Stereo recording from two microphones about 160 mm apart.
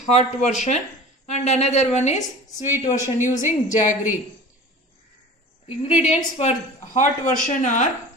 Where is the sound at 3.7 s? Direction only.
50° left (ahead or behind).